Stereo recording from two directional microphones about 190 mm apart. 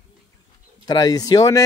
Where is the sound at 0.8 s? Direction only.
20° left (ahead or behind).